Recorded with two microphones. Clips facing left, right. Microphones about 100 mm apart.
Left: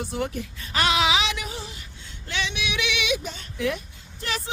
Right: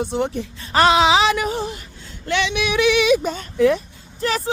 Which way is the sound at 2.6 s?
40° right (ahead or behind).